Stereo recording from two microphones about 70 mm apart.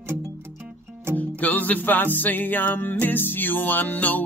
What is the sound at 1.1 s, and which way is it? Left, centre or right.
Music, left.